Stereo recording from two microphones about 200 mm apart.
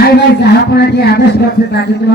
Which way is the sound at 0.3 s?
55° left (ahead or behind).